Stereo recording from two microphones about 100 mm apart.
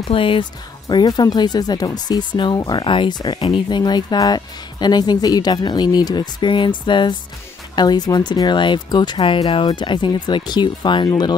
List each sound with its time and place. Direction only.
0.1 s speech: 65° left (ahead or behind)
0.8 s speech: 40° left (ahead or behind)
2.8 s speech: 55° left (ahead or behind)